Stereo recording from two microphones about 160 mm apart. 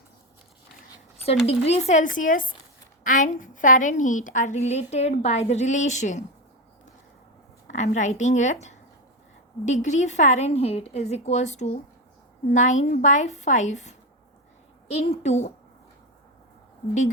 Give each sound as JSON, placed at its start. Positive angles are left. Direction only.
{"t": 1.2, "sound": "a woman's voice", "side_deg": 40}
{"t": 7.7, "sound": "a woman's voice", "side_deg": 50}
{"t": 9.6, "sound": "a woman's voice", "side_deg": 50}